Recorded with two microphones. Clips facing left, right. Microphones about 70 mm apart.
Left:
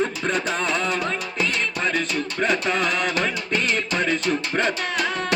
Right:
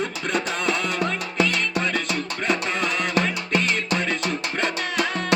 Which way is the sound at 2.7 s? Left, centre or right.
Left.